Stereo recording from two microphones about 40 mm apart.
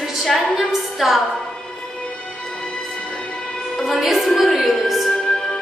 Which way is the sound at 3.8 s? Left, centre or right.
Centre.